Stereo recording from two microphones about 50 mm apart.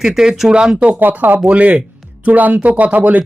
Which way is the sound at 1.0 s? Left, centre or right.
Right.